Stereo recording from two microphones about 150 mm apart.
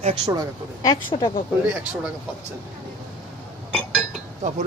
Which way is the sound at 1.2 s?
35° left (ahead or behind).